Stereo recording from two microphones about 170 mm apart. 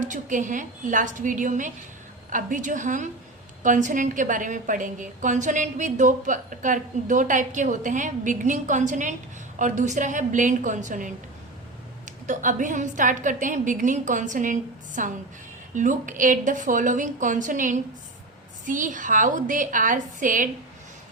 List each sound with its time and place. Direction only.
0.0 s a woman's voice: 50° right (ahead or behind)
12.2 s a woman's voice: 50° right (ahead or behind)